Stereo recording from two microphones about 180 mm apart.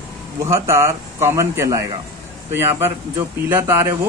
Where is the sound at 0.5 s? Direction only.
15° right (ahead or behind).